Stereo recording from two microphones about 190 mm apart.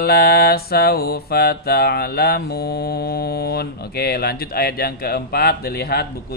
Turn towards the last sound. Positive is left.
turn(degrees=55)  # may be behind; listen again after turning